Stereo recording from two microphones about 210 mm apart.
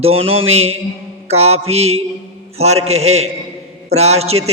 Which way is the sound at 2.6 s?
30° right (ahead or behind).